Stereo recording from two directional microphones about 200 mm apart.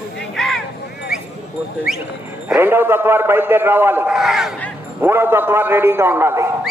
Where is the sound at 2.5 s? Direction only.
10° right (ahead or behind).